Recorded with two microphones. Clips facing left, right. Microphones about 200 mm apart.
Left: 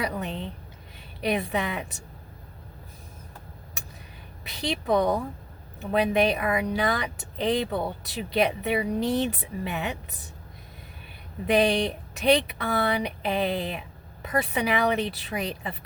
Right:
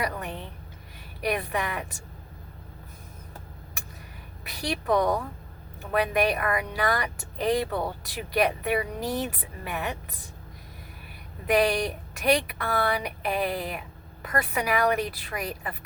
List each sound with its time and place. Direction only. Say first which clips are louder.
0.0 s a woman's voice: left 2 dB; 25° left (ahead or behind)
4.4 s a woman's voice: left 1 dB; 25° left (ahead or behind)
11.4 s a woman's voice: left 1 dB; 25° left (ahead or behind)